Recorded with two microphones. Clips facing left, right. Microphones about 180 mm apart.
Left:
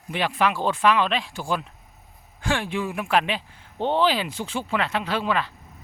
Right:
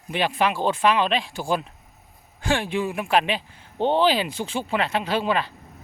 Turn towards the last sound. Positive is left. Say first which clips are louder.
# right 2 dB
turn(degrees=-30)  # may be behind; listen again after turning